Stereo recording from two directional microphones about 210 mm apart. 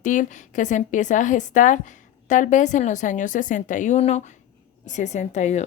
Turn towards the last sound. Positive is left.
turn(degrees=35)  # may be behind; listen again after turning